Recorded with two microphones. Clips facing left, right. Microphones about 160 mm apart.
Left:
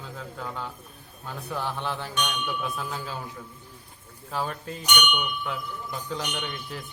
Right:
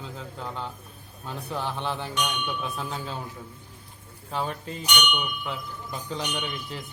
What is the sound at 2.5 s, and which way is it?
Speech, centre (ahead or behind).